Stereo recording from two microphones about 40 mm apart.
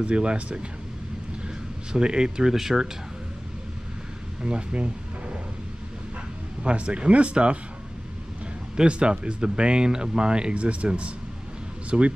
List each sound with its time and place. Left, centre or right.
0.0 s speech: right
1.9 s speech: right
4.4 s a sound: right
6.6 s speech: right
8.7 s speech: right